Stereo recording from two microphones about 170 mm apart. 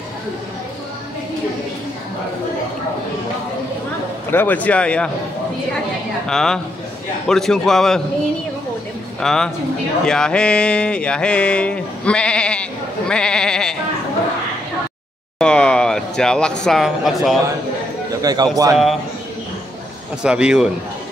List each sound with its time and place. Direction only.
4.3 s speech: 10° left (ahead or behind)
6.2 s speech: 5° left (ahead or behind)
9.2 s speech: 5° left (ahead or behind)
15.3 s a sound: 5° left (ahead or behind)
16.6 s speech: centre (ahead or behind)
18.2 s a man's voice: 25° right (ahead or behind)
20.2 s speech: 5° right (ahead or behind)